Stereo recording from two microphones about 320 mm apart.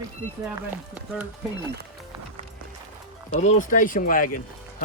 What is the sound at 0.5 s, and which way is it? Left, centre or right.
Speech, centre.